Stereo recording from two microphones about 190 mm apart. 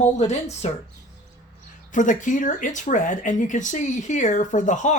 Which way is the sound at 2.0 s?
40° left (ahead or behind).